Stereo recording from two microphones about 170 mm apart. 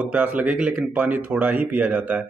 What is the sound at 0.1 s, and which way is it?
Speech, 10° right (ahead or behind).